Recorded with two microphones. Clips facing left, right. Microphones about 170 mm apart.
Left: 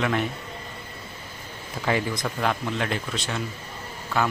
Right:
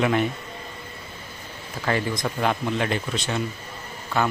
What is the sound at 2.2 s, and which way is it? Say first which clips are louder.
Speech: right 2 dB; 10° right (ahead or behind).